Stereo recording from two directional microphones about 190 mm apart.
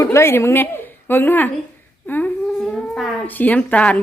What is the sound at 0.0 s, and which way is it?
Speech, 15° left (ahead or behind).